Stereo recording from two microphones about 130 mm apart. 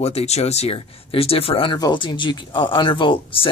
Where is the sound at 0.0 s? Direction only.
55° left (ahead or behind).